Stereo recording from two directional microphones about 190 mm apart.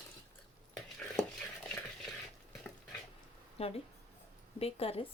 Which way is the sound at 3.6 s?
30° left (ahead or behind).